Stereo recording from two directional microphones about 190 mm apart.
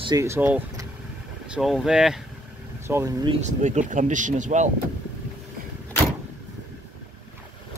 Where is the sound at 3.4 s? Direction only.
40° right (ahead or behind).